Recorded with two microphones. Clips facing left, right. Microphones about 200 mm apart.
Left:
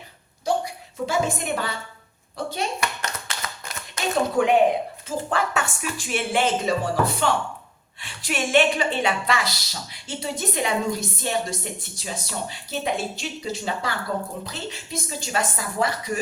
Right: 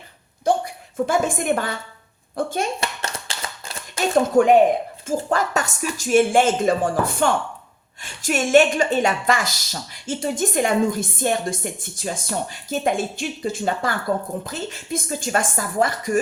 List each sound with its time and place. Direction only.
0.4 s a woman's voice: 50° right (ahead or behind)
2.8 s hands: 30° right (ahead or behind)
4.1 s a woman's voice: 45° right (ahead or behind)